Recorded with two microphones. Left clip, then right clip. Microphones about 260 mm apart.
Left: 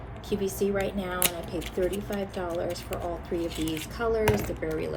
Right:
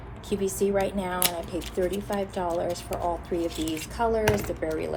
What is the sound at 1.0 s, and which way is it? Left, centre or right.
Speech, right.